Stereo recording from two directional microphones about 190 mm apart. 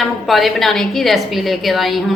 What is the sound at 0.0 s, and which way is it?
A woman's voice, centre (ahead or behind).